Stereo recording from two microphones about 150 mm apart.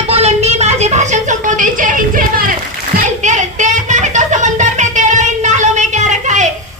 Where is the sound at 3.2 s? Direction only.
55° right (ahead or behind).